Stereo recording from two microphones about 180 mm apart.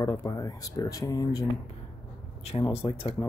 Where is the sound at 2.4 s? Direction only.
30° left (ahead or behind).